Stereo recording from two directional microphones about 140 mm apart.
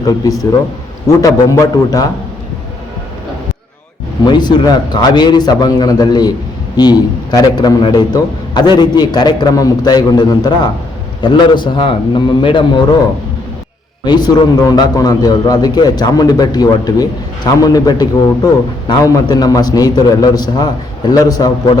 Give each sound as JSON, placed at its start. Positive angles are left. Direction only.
{"t": 0.0, "sound": "a man's voice", "side_deg": 25}
{"t": 4.3, "sound": "a man's voice", "side_deg": 30}
{"t": 14.0, "sound": "a man's voice", "side_deg": 30}